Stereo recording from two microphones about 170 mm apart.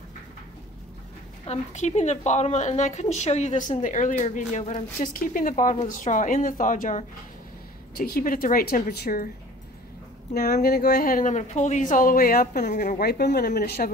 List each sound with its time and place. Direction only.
1.5 s a woman's voice: 40° left (ahead or behind); by 9.3 s 55° left (ahead or behind)
10.3 s a woman's voice: 65° left (ahead or behind)